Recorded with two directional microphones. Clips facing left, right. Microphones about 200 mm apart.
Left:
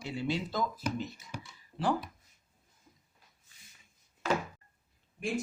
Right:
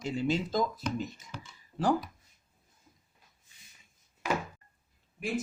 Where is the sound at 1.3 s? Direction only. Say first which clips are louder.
Left 1 dB; 15° left (ahead or behind).